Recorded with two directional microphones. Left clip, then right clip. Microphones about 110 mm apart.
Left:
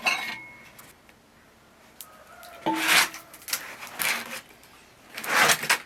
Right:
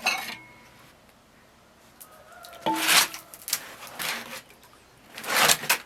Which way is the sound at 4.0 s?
10° left (ahead or behind).